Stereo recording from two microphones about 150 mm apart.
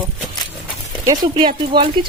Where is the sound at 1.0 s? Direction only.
25° right (ahead or behind).